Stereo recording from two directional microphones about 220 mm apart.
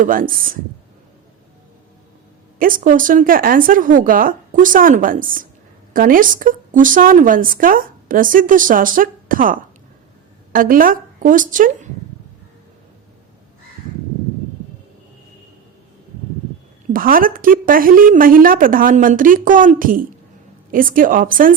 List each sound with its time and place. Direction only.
0.0 s a woman's voice: 40° right (ahead or behind)
2.6 s a woman's voice: 40° right (ahead or behind)
16.9 s a woman's voice: 40° right (ahead or behind)